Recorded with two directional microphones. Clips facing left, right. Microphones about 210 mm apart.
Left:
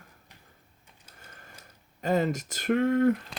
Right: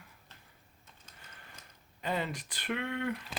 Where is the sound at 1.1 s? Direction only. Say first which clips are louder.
Left 5 dB; 45° left (ahead or behind).